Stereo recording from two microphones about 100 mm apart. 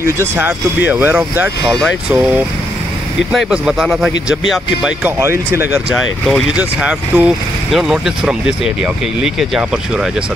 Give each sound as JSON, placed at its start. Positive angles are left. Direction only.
{"t": 0.0, "sound": "speech", "side_deg": -25}
{"t": 1.7, "sound": "speech", "side_deg": 5}
{"t": 2.0, "sound": "speech", "side_deg": -15}
{"t": 3.3, "sound": "speech", "side_deg": -5}
{"t": 5.2, "sound": "speech", "side_deg": -25}
{"t": 6.5, "sound": "speech", "side_deg": -10}